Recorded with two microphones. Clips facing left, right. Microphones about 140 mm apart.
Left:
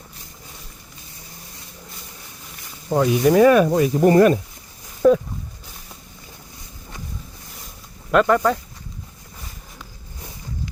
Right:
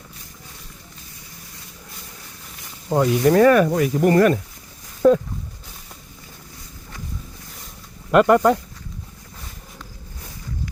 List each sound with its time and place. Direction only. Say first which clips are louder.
2.9 s speech: even; centre (ahead or behind); by 4.4 s 20° left (ahead or behind)
5.0 s a sound: even; centre (ahead or behind)
8.1 s speech: right 2 dB; 10° right (ahead or behind)